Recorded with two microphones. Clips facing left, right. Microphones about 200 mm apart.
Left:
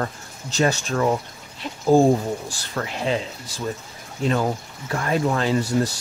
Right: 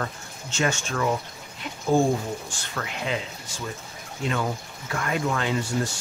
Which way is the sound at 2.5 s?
35° left (ahead or behind).